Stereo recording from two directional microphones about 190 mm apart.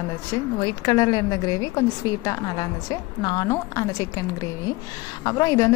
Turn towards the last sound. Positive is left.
turn(degrees=20)  # may be behind; listen again after turning